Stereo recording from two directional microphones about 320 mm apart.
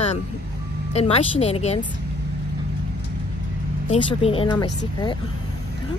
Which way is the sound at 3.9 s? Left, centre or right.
Centre.